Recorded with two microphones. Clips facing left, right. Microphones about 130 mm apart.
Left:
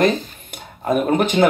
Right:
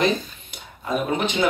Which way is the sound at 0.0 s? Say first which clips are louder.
Left 4 dB; 50° left (ahead or behind).